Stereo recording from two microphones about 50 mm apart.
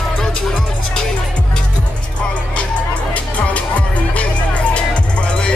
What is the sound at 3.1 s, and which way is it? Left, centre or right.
Music, left.